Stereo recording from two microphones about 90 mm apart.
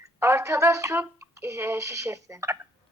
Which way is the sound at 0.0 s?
35° right (ahead or behind).